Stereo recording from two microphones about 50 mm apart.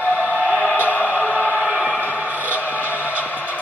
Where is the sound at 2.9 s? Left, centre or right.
Right.